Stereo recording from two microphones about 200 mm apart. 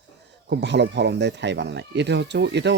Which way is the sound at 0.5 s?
60° right (ahead or behind).